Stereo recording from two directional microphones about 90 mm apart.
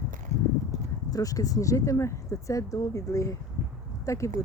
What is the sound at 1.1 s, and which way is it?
Speech, 40° left (ahead or behind).